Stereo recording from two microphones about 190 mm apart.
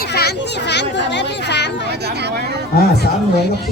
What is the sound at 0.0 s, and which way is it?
Children playing, 55° left (ahead or behind).